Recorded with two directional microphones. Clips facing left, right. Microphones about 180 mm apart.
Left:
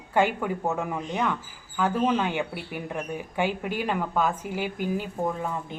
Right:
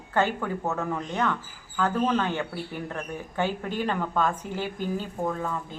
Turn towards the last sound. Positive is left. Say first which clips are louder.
# left 1 dB
turn(degrees=15)  # may be behind; listen again after turning